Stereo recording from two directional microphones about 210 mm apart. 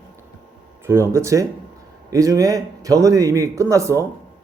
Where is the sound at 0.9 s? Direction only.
15° right (ahead or behind).